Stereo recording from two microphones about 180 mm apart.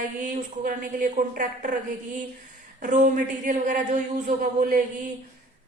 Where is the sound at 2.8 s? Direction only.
45° right (ahead or behind).